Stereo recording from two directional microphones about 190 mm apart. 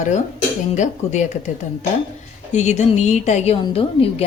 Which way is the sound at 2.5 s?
35° left (ahead or behind).